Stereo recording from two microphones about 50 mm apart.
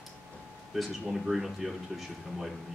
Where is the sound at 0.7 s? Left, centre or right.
Centre.